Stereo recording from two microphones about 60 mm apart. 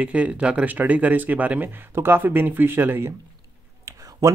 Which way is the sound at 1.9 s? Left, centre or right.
Right.